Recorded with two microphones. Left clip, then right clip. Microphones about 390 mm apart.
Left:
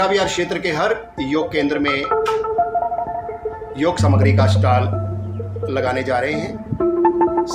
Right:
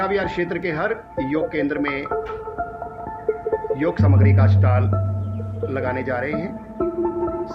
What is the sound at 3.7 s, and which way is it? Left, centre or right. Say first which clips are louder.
Speech: left 3 dB; right.